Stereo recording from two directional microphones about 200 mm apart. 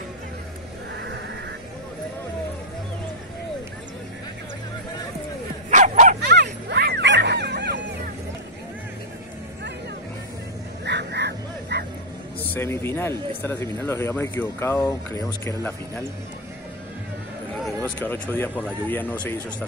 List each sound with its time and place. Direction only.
5.7 s dog: 40° right (ahead or behind)
6.2 s music: 60° right (ahead or behind)
10.9 s music: 60° right (ahead or behind)
12.4 s speech: 10° left (ahead or behind)
17.6 s speech: 5° left (ahead or behind)